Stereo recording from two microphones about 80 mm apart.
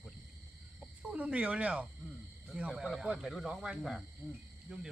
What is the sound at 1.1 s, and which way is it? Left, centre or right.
Speech, centre.